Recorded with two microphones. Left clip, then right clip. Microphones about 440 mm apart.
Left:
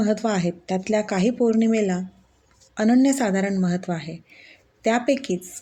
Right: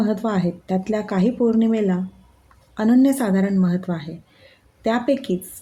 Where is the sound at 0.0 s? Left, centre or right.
Right.